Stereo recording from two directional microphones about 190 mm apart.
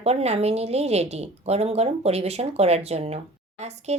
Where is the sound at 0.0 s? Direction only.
35° right (ahead or behind).